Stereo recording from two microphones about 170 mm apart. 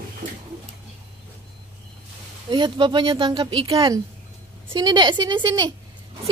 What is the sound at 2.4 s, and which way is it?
Speech, 30° right (ahead or behind).